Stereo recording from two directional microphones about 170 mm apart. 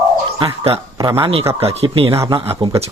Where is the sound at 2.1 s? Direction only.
15° right (ahead or behind).